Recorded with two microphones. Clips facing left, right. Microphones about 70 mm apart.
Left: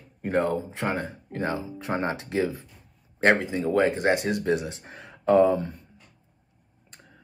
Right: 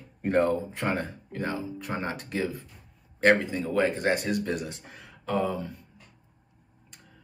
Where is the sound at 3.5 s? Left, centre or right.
Left.